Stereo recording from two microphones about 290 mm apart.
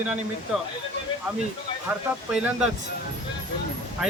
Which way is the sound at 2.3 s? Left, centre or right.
Centre.